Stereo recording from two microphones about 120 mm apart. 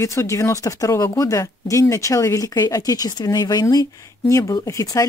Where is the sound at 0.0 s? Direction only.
25° left (ahead or behind).